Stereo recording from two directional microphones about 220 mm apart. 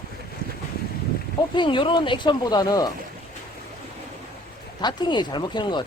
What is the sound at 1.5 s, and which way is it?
Speech, 20° left (ahead or behind).